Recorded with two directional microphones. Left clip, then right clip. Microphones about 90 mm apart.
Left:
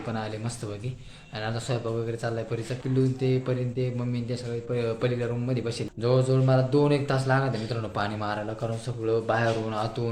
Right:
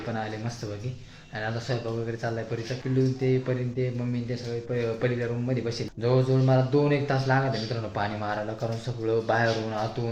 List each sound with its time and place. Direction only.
3.2 s speech: 25° left (ahead or behind)
9.0 s speech: centre (ahead or behind)